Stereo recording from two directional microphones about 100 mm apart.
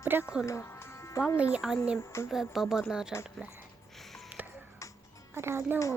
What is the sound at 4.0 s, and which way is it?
Music, centre (ahead or behind).